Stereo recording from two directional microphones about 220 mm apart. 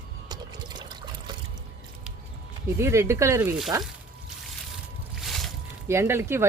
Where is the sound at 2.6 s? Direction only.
10° right (ahead or behind).